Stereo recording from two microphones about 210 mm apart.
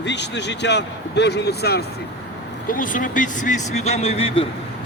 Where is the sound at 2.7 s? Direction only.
40° left (ahead or behind).